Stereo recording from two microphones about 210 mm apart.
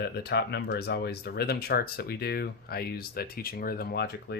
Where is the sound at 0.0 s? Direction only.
50° left (ahead or behind).